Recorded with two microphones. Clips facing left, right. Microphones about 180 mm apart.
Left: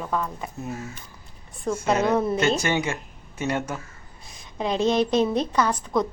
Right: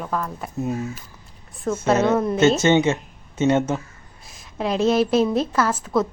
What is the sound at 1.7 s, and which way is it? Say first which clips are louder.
Speech: right 3 dB; centre (ahead or behind).